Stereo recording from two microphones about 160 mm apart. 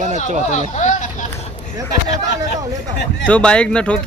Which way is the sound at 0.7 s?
50° left (ahead or behind).